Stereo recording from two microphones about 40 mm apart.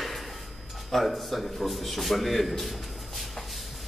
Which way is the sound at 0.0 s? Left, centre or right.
Centre.